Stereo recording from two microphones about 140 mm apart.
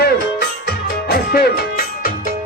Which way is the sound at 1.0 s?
90° left.